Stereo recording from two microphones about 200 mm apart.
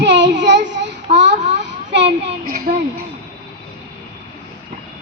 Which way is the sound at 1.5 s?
60° right (ahead or behind).